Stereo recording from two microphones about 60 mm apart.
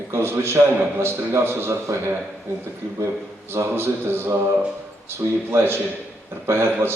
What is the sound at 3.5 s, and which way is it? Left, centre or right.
Speech, right.